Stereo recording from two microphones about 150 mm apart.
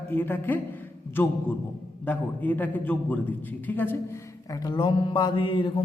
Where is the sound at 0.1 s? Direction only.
15° left (ahead or behind).